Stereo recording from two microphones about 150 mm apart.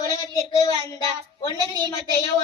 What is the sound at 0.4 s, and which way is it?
Child singing, 25° left (ahead or behind).